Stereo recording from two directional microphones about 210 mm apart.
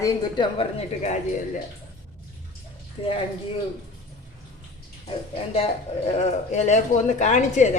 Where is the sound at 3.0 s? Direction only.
25° left (ahead or behind).